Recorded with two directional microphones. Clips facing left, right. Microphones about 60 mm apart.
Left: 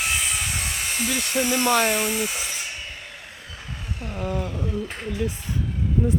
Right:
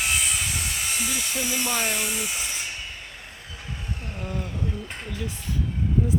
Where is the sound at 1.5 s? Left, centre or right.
Left.